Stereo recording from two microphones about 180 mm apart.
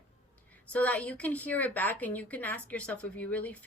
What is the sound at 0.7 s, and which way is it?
Speech, 5° left (ahead or behind).